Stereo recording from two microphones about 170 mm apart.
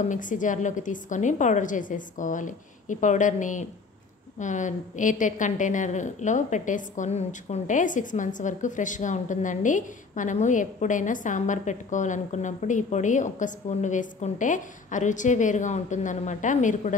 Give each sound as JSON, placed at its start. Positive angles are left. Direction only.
{"t": 0.0, "sound": "a woman's voice", "side_deg": 50}